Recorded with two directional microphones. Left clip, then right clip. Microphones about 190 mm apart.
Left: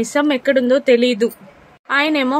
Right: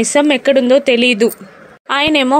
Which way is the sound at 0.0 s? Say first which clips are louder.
Right 5 dB; 15° right (ahead or behind).